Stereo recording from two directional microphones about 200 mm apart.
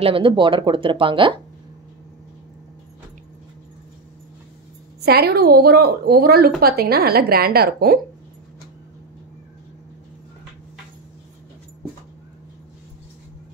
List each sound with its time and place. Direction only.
0.0 s speech: 25° right (ahead or behind)
5.0 s a woman's voice: 50° right (ahead or behind)